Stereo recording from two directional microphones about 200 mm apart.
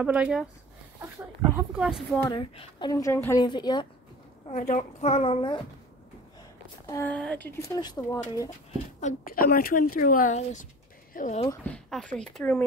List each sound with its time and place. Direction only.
0.0 s speech: 5° right (ahead or behind)
1.5 s speech: 5° right (ahead or behind)
2.2 s a woman's voice: 25° left (ahead or behind)
4.5 s a woman's voice: 40° left (ahead or behind)
6.9 s speech: 10° left (ahead or behind)
9.0 s a woman's voice: 45° left (ahead or behind)
11.6 s speech: 5° left (ahead or behind)